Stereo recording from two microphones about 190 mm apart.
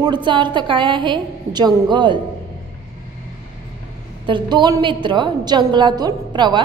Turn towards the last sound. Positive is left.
turn(degrees=-25)  # may be behind; listen again after turning